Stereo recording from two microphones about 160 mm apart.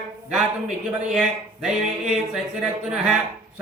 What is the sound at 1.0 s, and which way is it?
Speech, 5° right (ahead or behind).